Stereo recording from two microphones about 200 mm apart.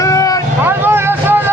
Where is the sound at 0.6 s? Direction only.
10° right (ahead or behind).